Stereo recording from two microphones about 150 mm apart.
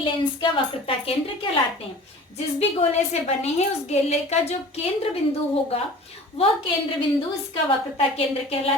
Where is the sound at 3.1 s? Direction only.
45° left (ahead or behind).